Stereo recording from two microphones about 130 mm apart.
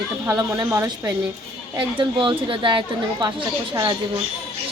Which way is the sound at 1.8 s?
40° right (ahead or behind).